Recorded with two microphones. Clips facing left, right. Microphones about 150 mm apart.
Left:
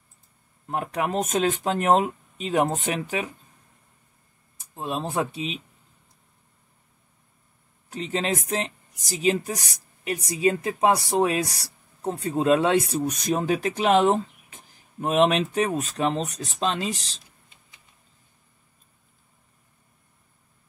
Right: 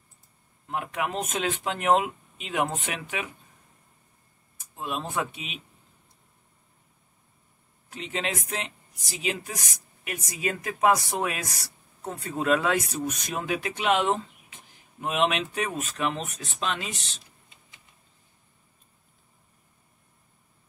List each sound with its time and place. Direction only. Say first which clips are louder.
0.7 s speech: left 4 dB; 40° left (ahead or behind)
4.7 s speech: left 4 dB; 30° left (ahead or behind)
7.9 s speech: left 5 dB; 40° left (ahead or behind)